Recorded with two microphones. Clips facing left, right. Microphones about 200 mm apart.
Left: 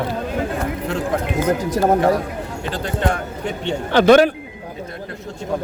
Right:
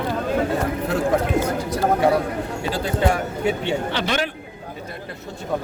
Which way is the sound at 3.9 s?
50° left (ahead or behind).